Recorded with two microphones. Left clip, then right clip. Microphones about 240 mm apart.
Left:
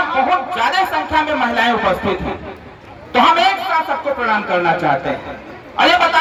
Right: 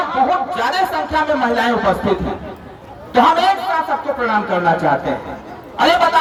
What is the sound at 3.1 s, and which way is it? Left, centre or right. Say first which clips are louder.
A man's voice: even; right.